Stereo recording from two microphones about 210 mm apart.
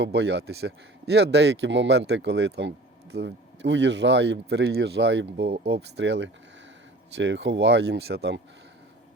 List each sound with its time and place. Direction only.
0.0 s speech: 55° right (ahead or behind)